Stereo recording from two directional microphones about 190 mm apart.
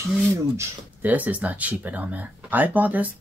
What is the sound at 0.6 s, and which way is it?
Speech, 10° right (ahead or behind).